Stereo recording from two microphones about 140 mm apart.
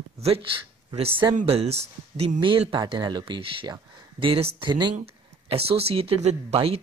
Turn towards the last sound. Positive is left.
turn(degrees=-45)  # may be behind; listen again after turning